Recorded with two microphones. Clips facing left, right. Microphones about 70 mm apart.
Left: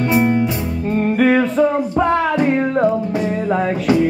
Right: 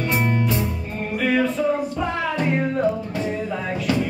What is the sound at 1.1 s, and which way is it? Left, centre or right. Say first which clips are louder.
Music: left 5 dB; left.